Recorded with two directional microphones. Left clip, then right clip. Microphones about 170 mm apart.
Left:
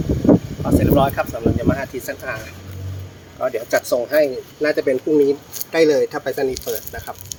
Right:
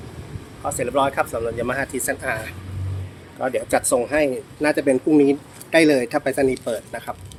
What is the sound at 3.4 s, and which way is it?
Speech, 30° right (ahead or behind).